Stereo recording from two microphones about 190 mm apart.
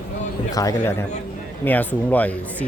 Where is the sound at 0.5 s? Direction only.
20° left (ahead or behind).